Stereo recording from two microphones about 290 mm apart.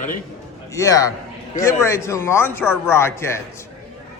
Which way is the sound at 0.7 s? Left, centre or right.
Centre.